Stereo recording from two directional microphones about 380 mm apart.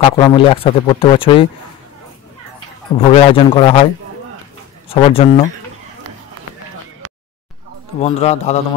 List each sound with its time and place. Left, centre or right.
0.0 s speech: centre
3.0 s speech: centre
4.8 s speech: centre
8.0 s speech: centre